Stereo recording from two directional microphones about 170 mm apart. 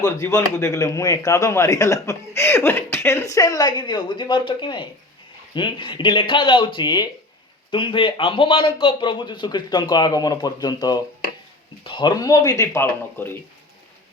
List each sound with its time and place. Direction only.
0.0 s a man's voice: 20° left (ahead or behind)